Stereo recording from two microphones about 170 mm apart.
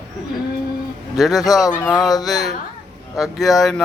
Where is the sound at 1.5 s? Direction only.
20° left (ahead or behind).